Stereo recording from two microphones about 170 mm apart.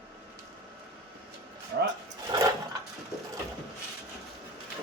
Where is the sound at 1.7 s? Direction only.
70° right (ahead or behind).